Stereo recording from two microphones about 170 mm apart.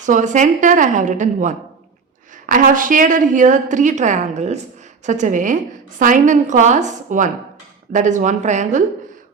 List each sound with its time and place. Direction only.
0.0 s a woman's voice: 45° right (ahead or behind)